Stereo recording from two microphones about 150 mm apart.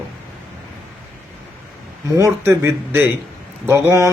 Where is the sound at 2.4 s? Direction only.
15° right (ahead or behind).